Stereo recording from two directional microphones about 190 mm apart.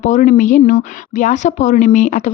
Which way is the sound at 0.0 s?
40° left (ahead or behind).